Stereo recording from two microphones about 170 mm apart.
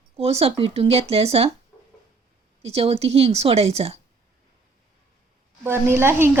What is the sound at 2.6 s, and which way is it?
Speech, 35° right (ahead or behind).